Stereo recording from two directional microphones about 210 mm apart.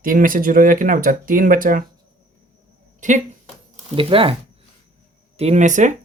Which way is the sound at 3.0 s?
35° right (ahead or behind).